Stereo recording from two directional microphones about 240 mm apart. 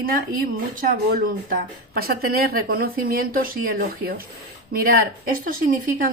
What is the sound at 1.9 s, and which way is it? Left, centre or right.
Speech, right.